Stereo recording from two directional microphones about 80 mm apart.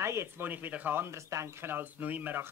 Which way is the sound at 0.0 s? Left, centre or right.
Right.